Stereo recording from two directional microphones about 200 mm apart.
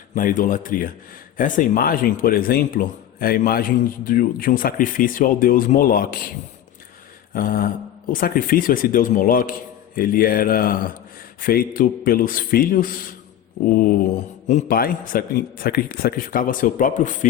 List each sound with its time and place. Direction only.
0.1 s speech: 45° left (ahead or behind)
7.3 s speech: 45° left (ahead or behind)
14.4 s speech: 40° left (ahead or behind)